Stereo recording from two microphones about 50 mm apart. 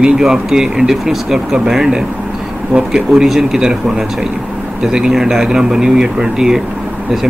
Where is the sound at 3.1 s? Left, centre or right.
Centre.